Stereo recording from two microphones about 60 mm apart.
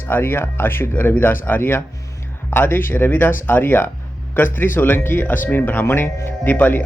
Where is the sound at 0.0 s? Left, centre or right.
Left.